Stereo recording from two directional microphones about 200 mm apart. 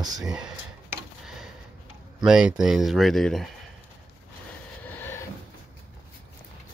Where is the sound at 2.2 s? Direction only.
5° right (ahead or behind).